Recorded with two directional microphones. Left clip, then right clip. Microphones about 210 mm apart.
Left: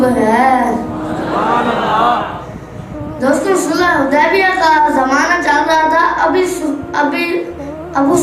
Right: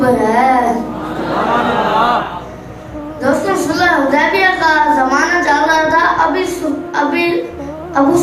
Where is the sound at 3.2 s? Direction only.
60° left (ahead or behind).